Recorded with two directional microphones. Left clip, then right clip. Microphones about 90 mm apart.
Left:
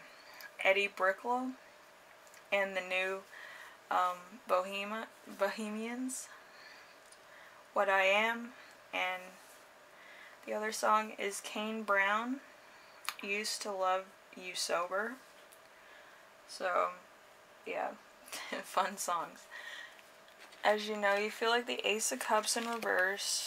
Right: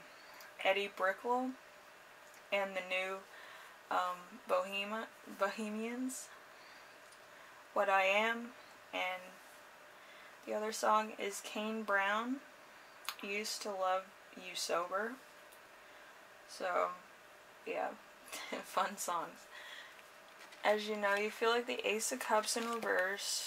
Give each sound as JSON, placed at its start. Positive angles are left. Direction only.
{"t": 0.6, "sound": "speech", "side_deg": 35}
{"t": 2.5, "sound": "speech", "side_deg": 35}
{"t": 7.7, "sound": "speech", "side_deg": 35}
{"t": 10.5, "sound": "speech", "side_deg": 35}
{"t": 16.5, "sound": "speech", "side_deg": 35}
{"t": 20.6, "sound": "speech", "side_deg": 35}